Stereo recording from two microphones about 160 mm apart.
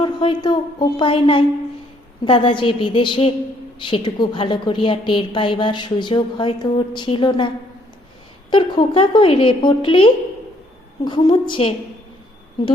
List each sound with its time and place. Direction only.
0.0 s a woman's voice: 30° left (ahead or behind)